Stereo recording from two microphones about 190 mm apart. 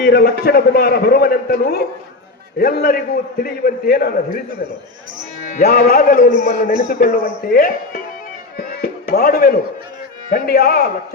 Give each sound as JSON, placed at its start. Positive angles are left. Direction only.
{"t": 0.0, "sound": "a man's voice", "side_deg": 55}
{"t": 5.5, "sound": "a man's voice", "side_deg": 50}
{"t": 8.5, "sound": "music", "side_deg": 55}
{"t": 10.3, "sound": "a man's voice", "side_deg": 55}